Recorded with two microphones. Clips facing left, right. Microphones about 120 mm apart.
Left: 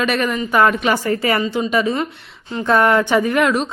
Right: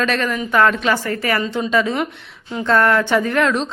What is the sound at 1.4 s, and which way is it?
A woman's voice, 5° left (ahead or behind).